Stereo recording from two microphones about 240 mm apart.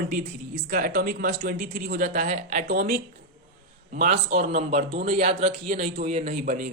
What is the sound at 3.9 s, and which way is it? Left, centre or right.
A man's voice, right.